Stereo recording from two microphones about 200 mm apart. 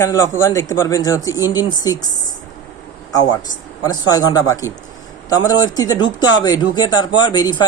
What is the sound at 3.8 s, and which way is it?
A man's voice, 20° left (ahead or behind).